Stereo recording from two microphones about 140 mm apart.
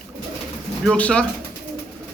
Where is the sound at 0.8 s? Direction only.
10° left (ahead or behind).